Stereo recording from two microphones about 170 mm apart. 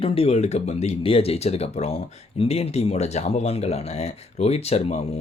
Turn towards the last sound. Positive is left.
turn(degrees=40)  # may be behind; listen again after turning